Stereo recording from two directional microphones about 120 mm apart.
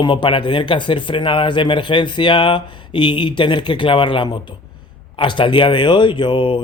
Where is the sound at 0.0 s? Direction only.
45° left (ahead or behind).